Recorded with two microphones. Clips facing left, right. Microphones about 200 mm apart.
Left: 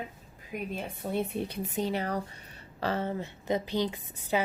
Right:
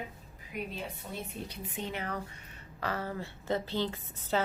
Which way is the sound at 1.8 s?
35° left (ahead or behind).